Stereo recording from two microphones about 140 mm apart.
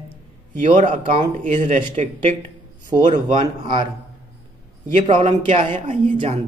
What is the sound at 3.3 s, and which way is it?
Speech, 35° right (ahead or behind).